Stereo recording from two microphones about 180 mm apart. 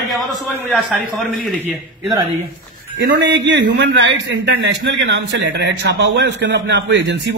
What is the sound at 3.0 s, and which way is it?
A man's voice, 70° right (ahead or behind).